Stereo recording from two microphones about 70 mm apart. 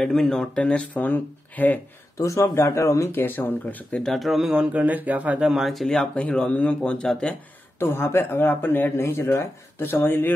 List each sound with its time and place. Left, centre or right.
0.0 s speech: centre
0.6 s speech: centre
2.1 s speech: left
3.1 s speech: left
4.1 s speech: centre
4.7 s speech: right
5.5 s speech: centre
6.1 s speech: centre
7.8 s speech: left
9.0 s speech: left
9.8 s speech: left